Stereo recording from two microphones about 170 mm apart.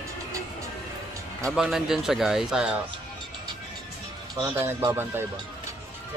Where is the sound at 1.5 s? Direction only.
Centre (ahead or behind).